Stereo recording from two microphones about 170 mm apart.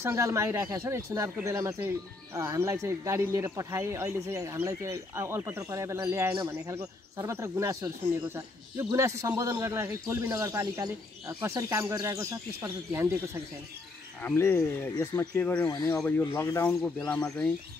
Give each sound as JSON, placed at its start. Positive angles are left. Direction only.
{"t": 0.0, "sound": "speech", "side_deg": -15}
{"t": 14.2, "sound": "speech", "side_deg": 15}